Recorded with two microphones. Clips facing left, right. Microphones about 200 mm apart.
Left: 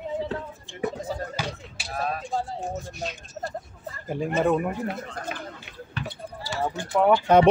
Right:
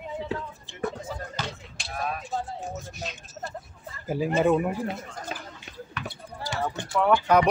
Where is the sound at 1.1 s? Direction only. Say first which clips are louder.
Left 4 dB; 30° left (ahead or behind).